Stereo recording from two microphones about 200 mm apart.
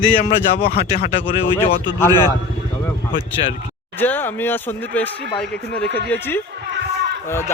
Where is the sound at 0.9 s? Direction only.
35° left (ahead or behind).